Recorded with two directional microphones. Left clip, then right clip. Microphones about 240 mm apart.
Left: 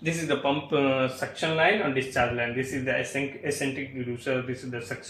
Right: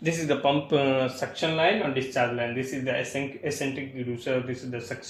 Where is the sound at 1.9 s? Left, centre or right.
Centre.